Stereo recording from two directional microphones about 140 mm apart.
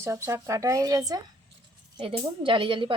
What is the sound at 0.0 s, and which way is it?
Speech, 20° right (ahead or behind).